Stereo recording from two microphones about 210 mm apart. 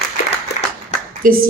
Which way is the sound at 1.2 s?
40° right (ahead or behind).